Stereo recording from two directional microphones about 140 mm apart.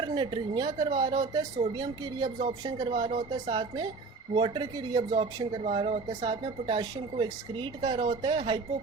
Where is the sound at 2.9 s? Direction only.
45° right (ahead or behind).